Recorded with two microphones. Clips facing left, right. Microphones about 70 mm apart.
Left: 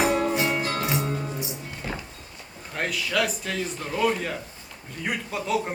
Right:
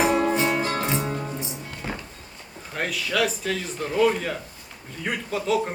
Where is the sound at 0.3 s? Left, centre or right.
Right.